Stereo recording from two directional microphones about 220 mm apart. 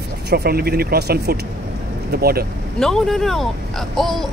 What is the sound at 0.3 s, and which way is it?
Speech, 45° right (ahead or behind).